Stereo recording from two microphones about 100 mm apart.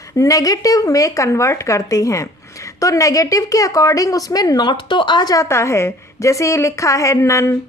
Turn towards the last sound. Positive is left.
turn(degrees=30)  # may be behind; listen again after turning